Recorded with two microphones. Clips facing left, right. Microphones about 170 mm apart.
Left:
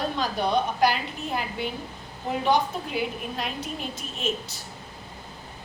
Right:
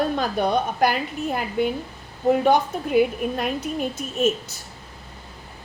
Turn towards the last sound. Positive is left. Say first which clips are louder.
# right 8 dB
turn(degrees=-45)  # may be behind; listen again after turning